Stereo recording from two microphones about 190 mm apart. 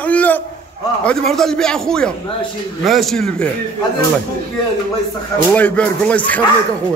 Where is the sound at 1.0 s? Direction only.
Centre (ahead or behind).